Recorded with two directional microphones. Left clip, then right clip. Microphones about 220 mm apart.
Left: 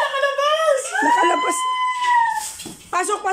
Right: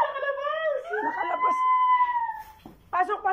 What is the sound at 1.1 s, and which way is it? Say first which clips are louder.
Speech: left 10 dB; 45° left (ahead or behind).